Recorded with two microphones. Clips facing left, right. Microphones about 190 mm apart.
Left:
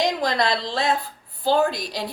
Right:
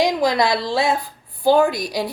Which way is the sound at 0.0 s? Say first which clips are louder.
Right 4 dB; 10° right (ahead or behind).